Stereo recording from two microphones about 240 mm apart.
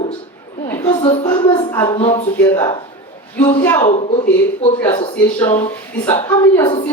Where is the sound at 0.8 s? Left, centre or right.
Left.